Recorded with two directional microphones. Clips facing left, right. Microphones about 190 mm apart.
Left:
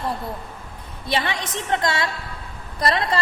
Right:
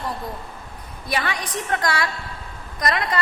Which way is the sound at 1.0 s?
25° left (ahead or behind).